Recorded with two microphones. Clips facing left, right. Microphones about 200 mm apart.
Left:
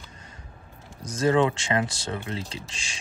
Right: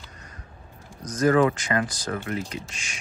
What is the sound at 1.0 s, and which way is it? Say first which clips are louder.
Speech: right 2 dB; 25° left (ahead or behind).